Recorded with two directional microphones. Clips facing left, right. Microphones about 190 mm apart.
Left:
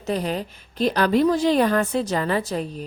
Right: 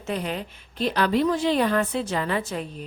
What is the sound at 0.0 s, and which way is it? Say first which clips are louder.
A woman's voice: left 4 dB; 40° left (ahead or behind).